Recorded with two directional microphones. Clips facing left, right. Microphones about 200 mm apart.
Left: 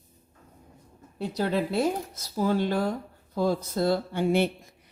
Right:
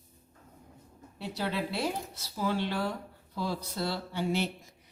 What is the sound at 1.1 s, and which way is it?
Speech, 45° left (ahead or behind).